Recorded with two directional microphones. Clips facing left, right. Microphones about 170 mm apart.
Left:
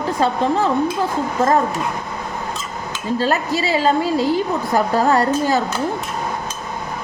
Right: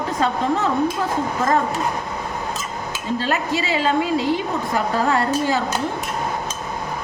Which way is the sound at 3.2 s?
40° left (ahead or behind).